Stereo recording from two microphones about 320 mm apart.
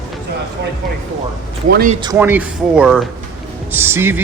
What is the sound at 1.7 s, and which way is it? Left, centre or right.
Speech, right.